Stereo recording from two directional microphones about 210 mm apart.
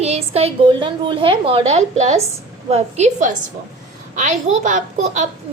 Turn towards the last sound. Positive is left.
turn(degrees=-35)  # may be behind; listen again after turning